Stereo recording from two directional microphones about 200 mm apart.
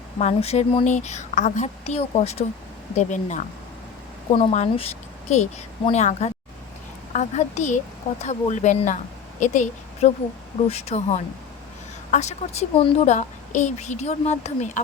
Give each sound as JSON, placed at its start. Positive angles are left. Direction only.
{"t": 0.2, "sound": "a woman's voice", "side_deg": 30}